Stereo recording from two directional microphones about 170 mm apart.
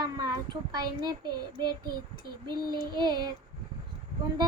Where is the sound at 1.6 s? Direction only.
60° left (ahead or behind).